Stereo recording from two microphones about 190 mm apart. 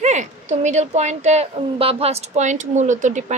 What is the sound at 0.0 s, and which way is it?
A child's voice, 40° right (ahead or behind).